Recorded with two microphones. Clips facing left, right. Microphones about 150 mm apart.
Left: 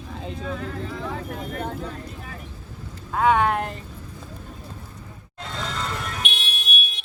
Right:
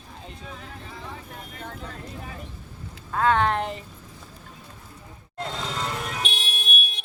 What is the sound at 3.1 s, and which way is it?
Speech, 10° left (ahead or behind).